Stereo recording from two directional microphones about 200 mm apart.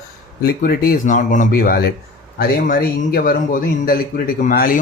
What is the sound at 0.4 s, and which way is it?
A man's voice, 50° left (ahead or behind).